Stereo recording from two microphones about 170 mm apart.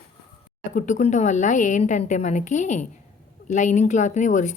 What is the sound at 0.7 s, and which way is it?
A woman's voice, 45° left (ahead or behind).